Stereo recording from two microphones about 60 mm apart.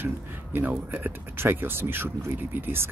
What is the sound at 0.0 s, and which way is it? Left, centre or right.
Speech, right.